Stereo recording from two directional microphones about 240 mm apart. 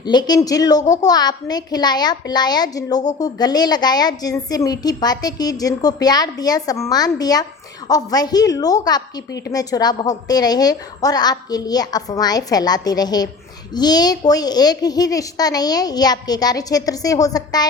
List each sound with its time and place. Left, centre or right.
0.0 s a woman's voice: centre